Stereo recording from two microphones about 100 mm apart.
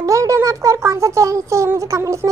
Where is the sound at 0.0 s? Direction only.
30° right (ahead or behind).